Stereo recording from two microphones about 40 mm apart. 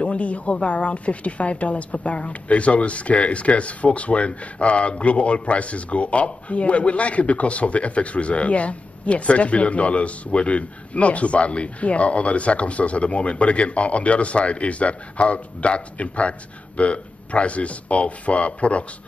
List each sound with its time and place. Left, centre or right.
0.0 s speech: left